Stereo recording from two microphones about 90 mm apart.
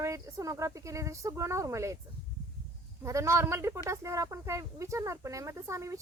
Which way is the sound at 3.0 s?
35° right (ahead or behind).